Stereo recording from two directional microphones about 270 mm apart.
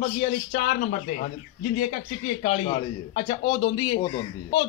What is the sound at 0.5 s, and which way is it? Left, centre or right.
Speech, left.